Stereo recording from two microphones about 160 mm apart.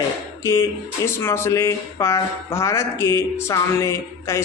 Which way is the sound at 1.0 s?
15° left (ahead or behind).